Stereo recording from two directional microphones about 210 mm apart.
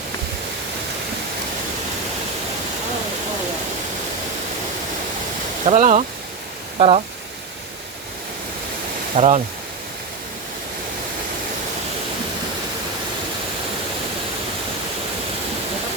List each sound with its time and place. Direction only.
5.6 s speech: 35° right (ahead or behind)
9.1 s speech: 30° right (ahead or behind)